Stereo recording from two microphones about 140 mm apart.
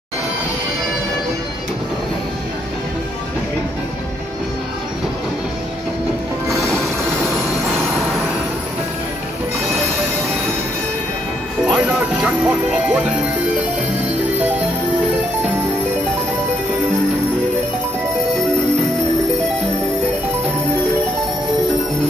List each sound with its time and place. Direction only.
6.4 s music: 20° right (ahead or behind)
11.6 s music: 5° right (ahead or behind)